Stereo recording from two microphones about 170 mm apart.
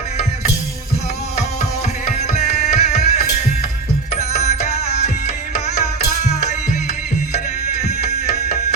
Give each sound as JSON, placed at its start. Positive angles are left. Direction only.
{"t": 2.1, "sound": "music", "side_deg": 40}
{"t": 7.3, "sound": "music", "side_deg": 45}